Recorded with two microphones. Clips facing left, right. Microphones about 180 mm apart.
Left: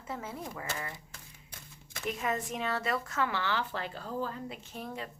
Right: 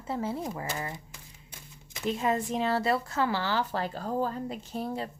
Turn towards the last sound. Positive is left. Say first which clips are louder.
# right 7 dB
turn(degrees=-35)  # may be behind; listen again after turning